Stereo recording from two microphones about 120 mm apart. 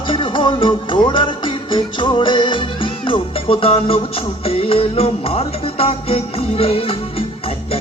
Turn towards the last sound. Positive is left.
turn(degrees=55)  # may be behind; listen again after turning